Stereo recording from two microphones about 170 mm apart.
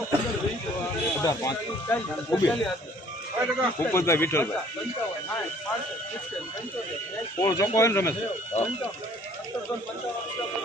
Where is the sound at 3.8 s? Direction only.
15° left (ahead or behind).